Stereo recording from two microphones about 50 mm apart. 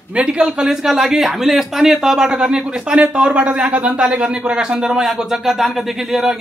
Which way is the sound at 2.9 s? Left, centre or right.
Right.